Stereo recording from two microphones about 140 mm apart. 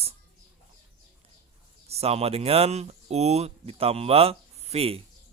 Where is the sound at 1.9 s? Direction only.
50° right (ahead or behind).